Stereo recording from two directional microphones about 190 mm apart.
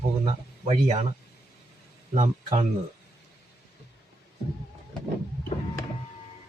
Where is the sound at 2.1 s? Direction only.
40° right (ahead or behind).